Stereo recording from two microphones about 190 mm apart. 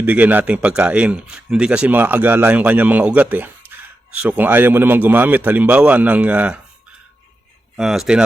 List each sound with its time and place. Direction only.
0.0 s speech: 10° right (ahead or behind)
7.8 s speech: centre (ahead or behind)